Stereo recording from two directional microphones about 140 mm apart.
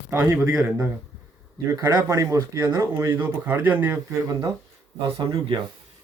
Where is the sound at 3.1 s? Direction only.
15° right (ahead or behind).